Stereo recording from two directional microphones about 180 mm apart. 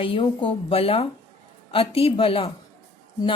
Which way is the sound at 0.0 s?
30° left (ahead or behind).